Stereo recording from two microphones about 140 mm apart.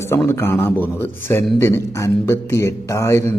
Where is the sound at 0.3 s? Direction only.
15° left (ahead or behind).